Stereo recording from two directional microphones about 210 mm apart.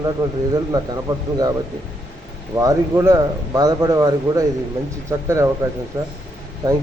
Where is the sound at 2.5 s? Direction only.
15° right (ahead or behind).